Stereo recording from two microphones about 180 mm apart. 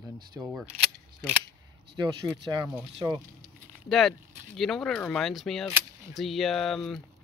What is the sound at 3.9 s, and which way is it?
Speech, centre (ahead or behind).